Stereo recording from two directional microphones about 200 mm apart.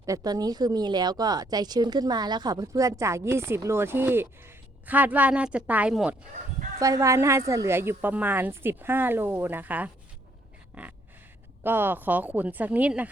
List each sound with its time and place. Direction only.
0.0 s speech: 15° right (ahead or behind)
6.7 s speech: 15° right (ahead or behind)